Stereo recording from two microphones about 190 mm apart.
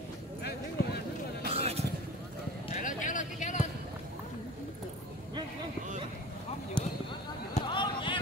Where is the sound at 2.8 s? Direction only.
40° left (ahead or behind).